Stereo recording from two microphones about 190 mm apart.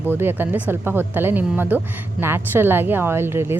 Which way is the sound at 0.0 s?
10° right (ahead or behind).